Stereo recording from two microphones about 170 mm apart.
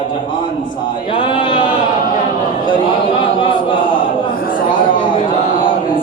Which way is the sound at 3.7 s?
30° left (ahead or behind).